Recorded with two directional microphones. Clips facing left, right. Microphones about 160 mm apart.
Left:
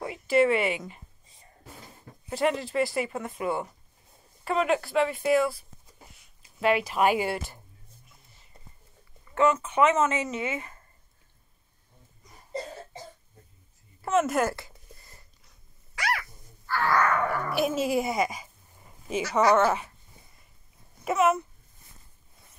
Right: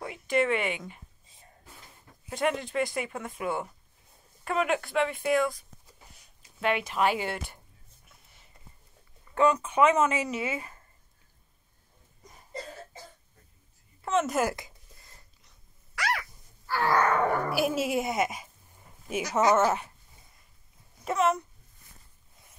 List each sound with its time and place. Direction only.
0.0 s speech: 5° left (ahead or behind)
2.2 s speech: centre (ahead or behind)
6.6 s speech: 5° left (ahead or behind)
9.3 s speech: 15° right (ahead or behind)
14.0 s speech: centre (ahead or behind)
14.4 s speech: 15° right (ahead or behind)
16.8 s wild animals: 25° right (ahead or behind)
17.5 s speech: 5° right (ahead or behind)
21.0 s a child's voice: 5° left (ahead or behind)